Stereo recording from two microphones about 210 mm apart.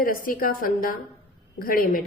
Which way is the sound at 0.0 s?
40° left (ahead or behind).